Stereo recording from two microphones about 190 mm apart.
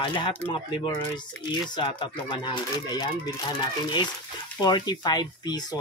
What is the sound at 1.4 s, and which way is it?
Speech, 25° left (ahead or behind).